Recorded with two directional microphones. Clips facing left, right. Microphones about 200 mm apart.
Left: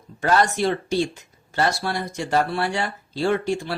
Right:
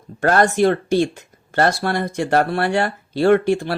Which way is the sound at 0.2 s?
55° right (ahead or behind).